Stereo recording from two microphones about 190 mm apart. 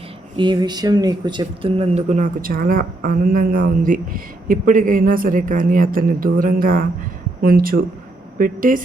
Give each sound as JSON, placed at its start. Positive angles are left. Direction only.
{"t": 0.3, "sound": "speech", "side_deg": -25}